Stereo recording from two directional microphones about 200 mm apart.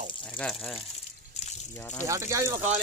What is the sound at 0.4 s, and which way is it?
Speech, 5° left (ahead or behind).